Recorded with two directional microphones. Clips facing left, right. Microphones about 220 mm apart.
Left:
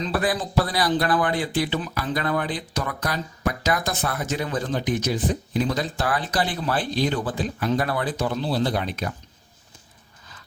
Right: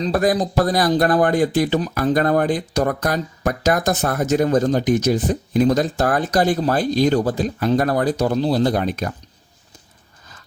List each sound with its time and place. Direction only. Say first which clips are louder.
0.0 s speech: right 6 dB; 45° right (ahead or behind)